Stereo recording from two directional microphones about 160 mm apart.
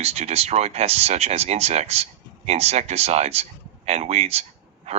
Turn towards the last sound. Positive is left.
turn(degrees=-40)  # may be behind; listen again after turning